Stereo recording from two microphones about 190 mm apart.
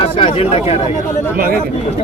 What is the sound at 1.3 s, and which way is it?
Speech, 50° right (ahead or behind).